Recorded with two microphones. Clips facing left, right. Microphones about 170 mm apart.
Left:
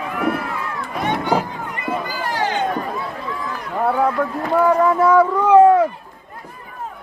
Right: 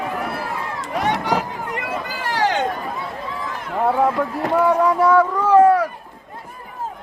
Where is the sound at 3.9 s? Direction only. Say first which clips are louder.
Even; 5° right (ahead or behind).